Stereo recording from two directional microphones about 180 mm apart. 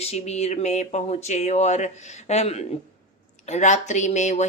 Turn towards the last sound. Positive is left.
turn(degrees=40)  # may be behind; listen again after turning